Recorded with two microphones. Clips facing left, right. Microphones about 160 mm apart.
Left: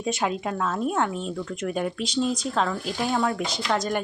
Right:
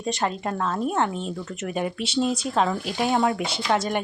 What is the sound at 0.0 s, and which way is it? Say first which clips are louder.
Speech: even; 5° left (ahead or behind).